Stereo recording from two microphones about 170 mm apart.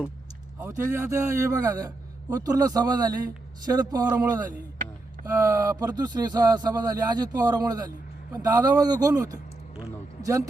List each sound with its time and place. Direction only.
0.6 s a man's voice: 15° right (ahead or behind)